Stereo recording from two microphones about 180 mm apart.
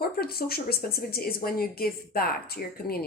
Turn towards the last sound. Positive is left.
turn(degrees=55)  # may be behind; listen again after turning